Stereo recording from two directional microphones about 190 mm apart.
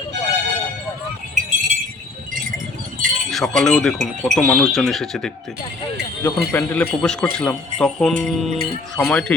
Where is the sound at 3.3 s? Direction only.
Centre (ahead or behind).